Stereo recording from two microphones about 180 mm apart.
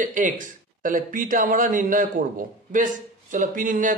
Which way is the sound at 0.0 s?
45° right (ahead or behind).